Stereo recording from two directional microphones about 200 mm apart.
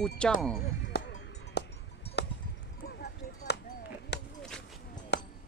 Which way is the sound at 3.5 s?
55° left (ahead or behind).